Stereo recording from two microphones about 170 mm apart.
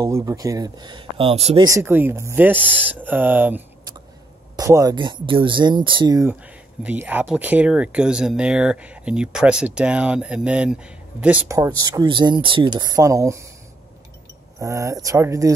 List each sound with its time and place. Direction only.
0.0 s speech: 20° right (ahead or behind); by 1.6 s 35° right (ahead or behind)
1.6 s speech: 15° right (ahead or behind)
6.4 s speech: 10° right (ahead or behind)
11.4 s speech: 20° right (ahead or behind)
14.6 s speech: 20° right (ahead or behind)